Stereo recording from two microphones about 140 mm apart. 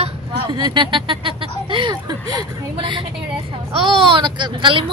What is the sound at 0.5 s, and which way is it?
Speech, 35° right (ahead or behind).